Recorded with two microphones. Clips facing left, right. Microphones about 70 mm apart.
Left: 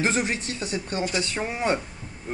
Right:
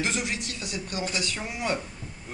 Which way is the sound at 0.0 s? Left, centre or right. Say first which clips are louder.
Left 5 dB; left.